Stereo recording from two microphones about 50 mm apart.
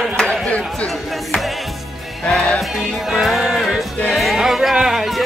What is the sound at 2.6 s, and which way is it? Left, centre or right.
Music, centre.